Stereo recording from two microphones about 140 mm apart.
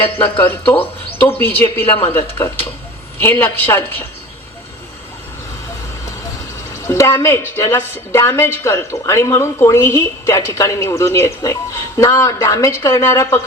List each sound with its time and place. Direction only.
0.2 s speech: 15° left (ahead or behind)
1.8 s speech: 40° left (ahead or behind)
3.2 s speech: 15° left (ahead or behind)
6.8 s a woman's voice: 20° left (ahead or behind)